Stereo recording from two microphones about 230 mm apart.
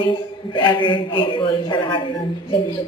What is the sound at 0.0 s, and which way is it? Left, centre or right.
A woman's voice, left.